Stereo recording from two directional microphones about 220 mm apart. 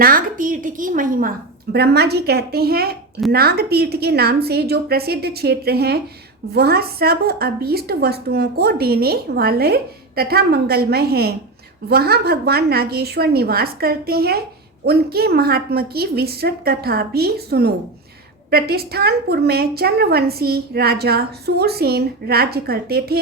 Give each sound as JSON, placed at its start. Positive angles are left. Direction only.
{"t": 0.0, "sound": "a woman's voice", "side_deg": -40}